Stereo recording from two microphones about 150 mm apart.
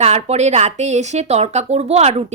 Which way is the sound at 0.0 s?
45° right (ahead or behind).